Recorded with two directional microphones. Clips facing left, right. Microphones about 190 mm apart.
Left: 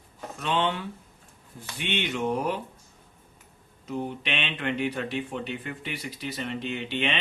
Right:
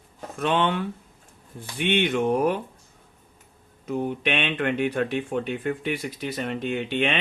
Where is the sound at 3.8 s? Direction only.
55° right (ahead or behind).